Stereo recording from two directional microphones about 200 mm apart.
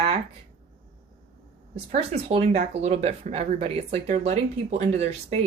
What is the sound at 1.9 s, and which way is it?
Speech, 30° right (ahead or behind).